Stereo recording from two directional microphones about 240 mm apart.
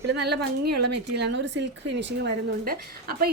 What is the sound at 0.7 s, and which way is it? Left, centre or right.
Speech, right.